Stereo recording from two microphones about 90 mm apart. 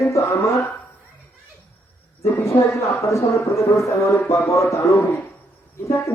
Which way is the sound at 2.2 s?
30° left (ahead or behind).